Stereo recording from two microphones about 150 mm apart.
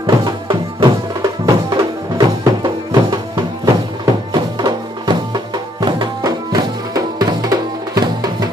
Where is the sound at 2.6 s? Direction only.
30° right (ahead or behind).